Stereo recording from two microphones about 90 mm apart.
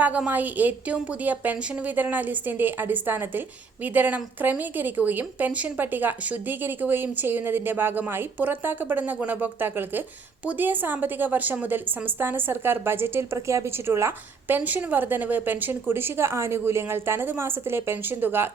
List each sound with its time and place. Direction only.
0.3 s a woman's voice: 20° right (ahead or behind)